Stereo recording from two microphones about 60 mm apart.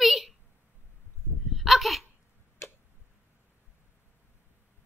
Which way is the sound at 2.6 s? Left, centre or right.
Left.